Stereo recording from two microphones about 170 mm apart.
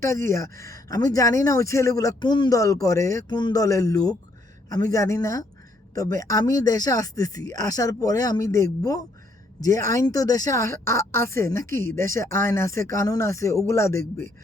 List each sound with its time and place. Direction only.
0.0 s speech: 20° left (ahead or behind)